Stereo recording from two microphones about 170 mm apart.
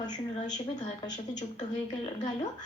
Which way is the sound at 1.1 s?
25° left (ahead or behind).